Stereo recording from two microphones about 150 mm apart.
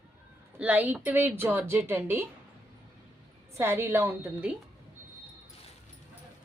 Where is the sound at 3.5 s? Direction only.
15° right (ahead or behind).